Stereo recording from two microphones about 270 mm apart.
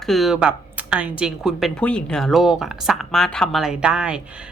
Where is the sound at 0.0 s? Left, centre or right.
Centre.